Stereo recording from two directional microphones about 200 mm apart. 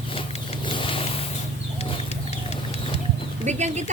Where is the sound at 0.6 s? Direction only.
25° left (ahead or behind).